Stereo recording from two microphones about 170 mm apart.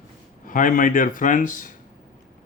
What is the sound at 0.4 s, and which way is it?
Speech, 50° left (ahead or behind).